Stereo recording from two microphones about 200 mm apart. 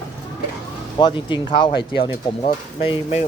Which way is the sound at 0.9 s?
25° left (ahead or behind).